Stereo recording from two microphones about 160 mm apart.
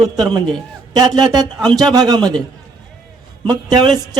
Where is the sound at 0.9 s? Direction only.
25° right (ahead or behind).